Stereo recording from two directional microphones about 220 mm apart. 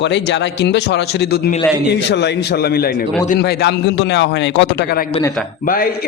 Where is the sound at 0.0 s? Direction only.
50° left (ahead or behind).